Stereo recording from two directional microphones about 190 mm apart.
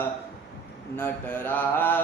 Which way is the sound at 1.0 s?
10° left (ahead or behind).